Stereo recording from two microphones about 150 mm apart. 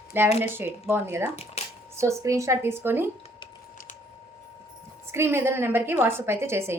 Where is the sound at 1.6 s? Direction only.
45° left (ahead or behind).